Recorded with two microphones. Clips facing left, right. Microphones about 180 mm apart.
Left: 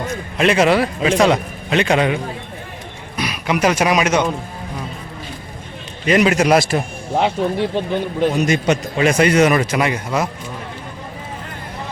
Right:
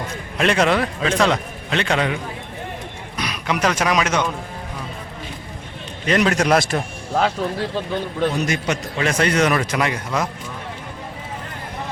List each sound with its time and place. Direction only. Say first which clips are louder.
0.3 s a man's voice: left 3 dB; 5° left (ahead or behind)
3.2 s speech: left 4 dB; 10° left (ahead or behind)
6.1 s a man's voice: left 3 dB; 10° left (ahead or behind)
7.1 s a man's voice: left 3 dB; 20° left (ahead or behind)